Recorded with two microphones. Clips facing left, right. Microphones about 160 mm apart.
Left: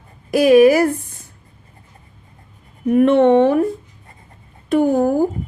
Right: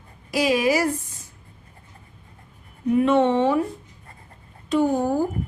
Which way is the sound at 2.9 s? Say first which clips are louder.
Left 6 dB; 60° left (ahead or behind).